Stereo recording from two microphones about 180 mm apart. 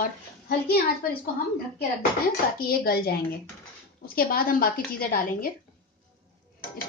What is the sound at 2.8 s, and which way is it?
Speech, 60° left (ahead or behind).